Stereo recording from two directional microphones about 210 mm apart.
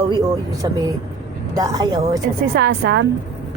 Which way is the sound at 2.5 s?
50° right (ahead or behind).